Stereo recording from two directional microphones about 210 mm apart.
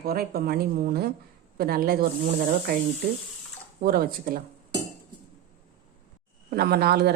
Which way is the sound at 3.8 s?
45° right (ahead or behind).